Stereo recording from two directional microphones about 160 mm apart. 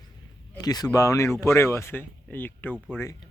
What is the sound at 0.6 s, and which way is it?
Speech, 25° left (ahead or behind).